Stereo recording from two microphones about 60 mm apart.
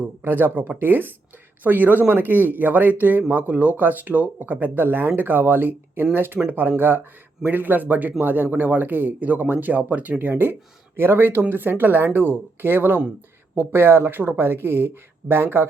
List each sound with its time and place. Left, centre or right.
0.3 s a man's voice: right